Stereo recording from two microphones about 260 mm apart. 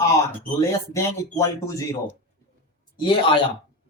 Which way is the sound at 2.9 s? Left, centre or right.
Centre.